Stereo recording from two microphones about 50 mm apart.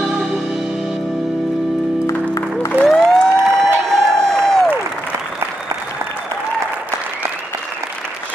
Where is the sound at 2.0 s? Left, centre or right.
Left.